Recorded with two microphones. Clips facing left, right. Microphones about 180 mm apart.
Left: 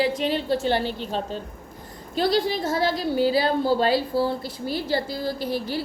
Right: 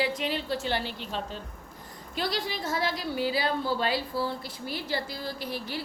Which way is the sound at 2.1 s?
30° left (ahead or behind).